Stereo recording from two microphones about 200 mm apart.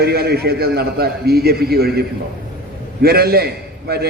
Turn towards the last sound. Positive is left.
turn(degrees=-50)  # may be behind; listen again after turning